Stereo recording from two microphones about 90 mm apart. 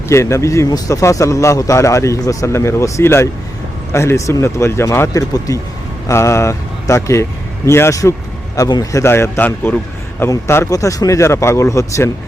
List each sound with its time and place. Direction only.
0.1 s a man's voice: 35° left (ahead or behind)